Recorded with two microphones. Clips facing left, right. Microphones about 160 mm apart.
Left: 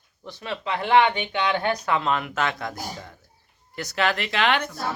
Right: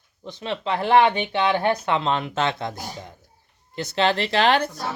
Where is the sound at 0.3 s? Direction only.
25° right (ahead or behind).